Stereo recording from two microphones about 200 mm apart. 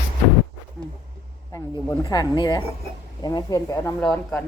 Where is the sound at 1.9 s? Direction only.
15° left (ahead or behind).